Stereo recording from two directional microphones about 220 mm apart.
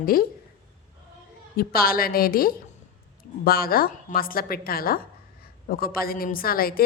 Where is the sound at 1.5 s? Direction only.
40° left (ahead or behind).